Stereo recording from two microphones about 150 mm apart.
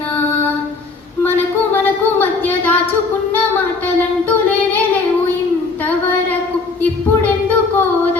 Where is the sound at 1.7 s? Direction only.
10° left (ahead or behind).